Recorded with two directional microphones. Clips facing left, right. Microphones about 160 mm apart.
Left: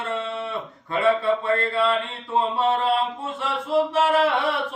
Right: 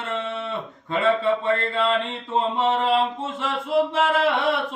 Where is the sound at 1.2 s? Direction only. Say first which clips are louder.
Even; 20° right (ahead or behind).